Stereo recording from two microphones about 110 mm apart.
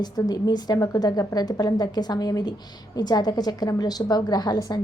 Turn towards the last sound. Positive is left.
turn(degrees=35)  # may be behind; listen again after turning